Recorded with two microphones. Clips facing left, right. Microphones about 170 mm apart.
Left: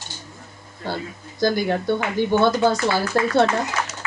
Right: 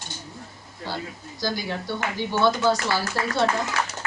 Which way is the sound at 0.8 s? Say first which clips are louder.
Left 4 dB; 50° left (ahead or behind).